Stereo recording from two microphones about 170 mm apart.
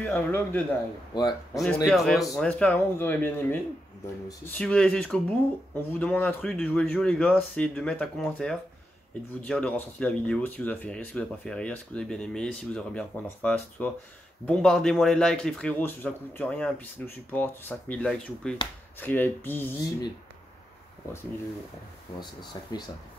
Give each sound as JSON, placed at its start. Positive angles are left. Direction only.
{"t": 0.0, "sound": "speech", "side_deg": 10}
{"t": 1.1, "sound": "speech", "side_deg": 25}
{"t": 1.9, "sound": "speech", "side_deg": 0}
{"t": 22.2, "sound": "speech", "side_deg": 25}